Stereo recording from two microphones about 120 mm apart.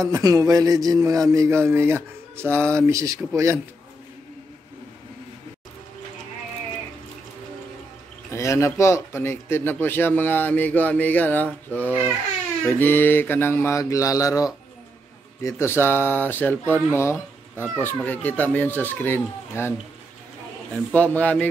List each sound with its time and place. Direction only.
0.0 s speech: 30° right (ahead or behind)
8.3 s speech: 25° left (ahead or behind)
12.6 s mantra: 15° left (ahead or behind)
15.4 s speech: 20° left (ahead or behind)
20.9 s speech: 10° left (ahead or behind)